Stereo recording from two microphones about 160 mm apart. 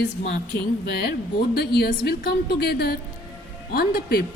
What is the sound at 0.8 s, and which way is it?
A woman's voice, 90° left.